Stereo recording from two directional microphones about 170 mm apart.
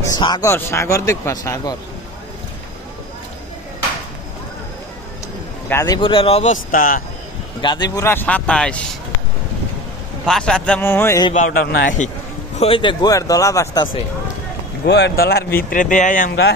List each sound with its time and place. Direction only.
0.0 s a man's voice: 25° left (ahead or behind)
5.7 s a man's voice: 15° left (ahead or behind)
5.9 s speech: 30° left (ahead or behind); by 7.0 s 55° left (ahead or behind)
7.6 s a man's voice: 25° left (ahead or behind); by 8.8 s 5° left (ahead or behind)
10.2 s a man's voice: 5° left (ahead or behind)
11.3 s a man's voice: 55° left (ahead or behind)
12.5 s a man's voice: 30° left (ahead or behind)
14.9 s speech: 85° left; by 16.3 s 50° left (ahead or behind)
16.3 s speech: 75° left (ahead or behind)